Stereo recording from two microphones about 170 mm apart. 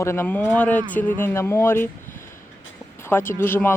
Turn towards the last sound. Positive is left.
turn(degrees=15)  # may be behind; listen again after turning